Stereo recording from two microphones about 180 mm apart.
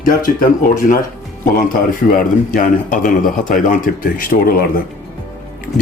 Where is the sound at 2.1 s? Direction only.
50° left (ahead or behind).